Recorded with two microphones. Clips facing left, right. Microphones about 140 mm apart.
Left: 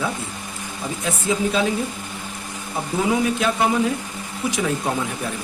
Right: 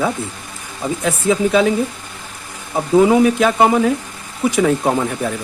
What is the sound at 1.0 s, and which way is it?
Speech, 65° right (ahead or behind).